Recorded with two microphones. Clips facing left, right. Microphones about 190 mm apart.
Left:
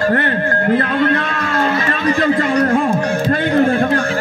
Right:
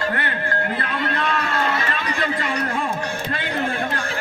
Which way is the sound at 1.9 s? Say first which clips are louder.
Left 9 dB; 45° left (ahead or behind).